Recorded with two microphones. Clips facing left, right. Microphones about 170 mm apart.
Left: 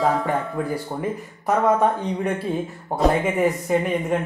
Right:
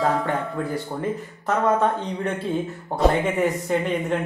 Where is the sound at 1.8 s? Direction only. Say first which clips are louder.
Left 2 dB; 10° left (ahead or behind).